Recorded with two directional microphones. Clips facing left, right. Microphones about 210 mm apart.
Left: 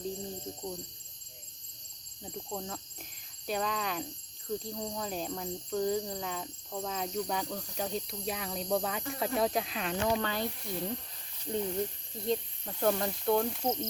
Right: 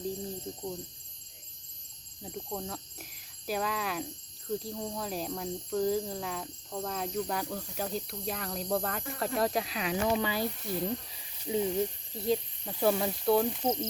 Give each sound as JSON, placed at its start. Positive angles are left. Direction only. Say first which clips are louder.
{"t": 2.2, "sound": "speech", "louder": "right 1 dB", "side_deg": 0}